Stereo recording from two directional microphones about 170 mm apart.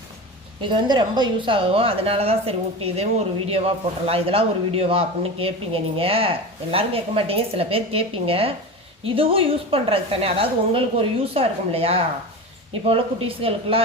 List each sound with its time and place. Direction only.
0.7 s a woman's voice: 25° right (ahead or behind)